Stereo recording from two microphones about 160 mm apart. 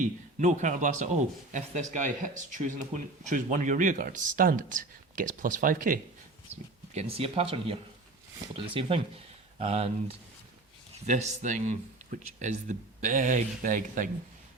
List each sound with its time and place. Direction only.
0.3 s speech: 50° right (ahead or behind)
6.9 s speech: 40° right (ahead or behind); by 14.1 s 55° right (ahead or behind)